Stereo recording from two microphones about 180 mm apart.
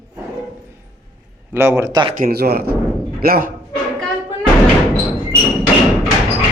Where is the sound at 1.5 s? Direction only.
15° right (ahead or behind).